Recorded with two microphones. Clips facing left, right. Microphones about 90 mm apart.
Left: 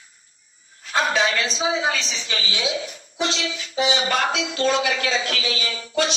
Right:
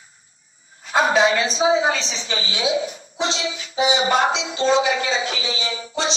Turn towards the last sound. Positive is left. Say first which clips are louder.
# left 2 dB
turn(degrees=-15)  # may be behind; listen again after turning